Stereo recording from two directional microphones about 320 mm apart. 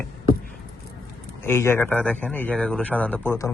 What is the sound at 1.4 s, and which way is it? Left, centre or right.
A man's voice, centre.